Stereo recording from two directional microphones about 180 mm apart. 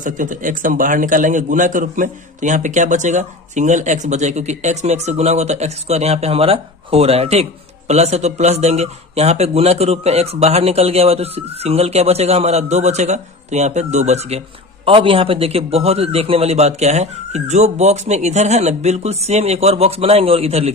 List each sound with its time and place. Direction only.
0.0 s a man's voice: 45° right (ahead or behind)